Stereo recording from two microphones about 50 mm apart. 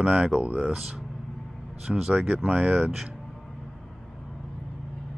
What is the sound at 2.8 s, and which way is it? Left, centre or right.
Speech, centre.